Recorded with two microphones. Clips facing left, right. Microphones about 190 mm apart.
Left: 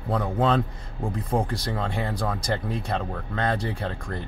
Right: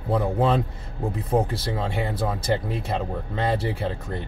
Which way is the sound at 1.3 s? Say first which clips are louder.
Right 3 dB; 5° right (ahead or behind).